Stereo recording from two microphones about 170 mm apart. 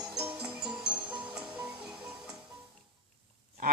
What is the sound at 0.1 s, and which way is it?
Music, 5° right (ahead or behind).